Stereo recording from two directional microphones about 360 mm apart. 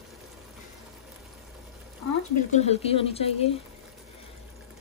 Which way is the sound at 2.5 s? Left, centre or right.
Centre.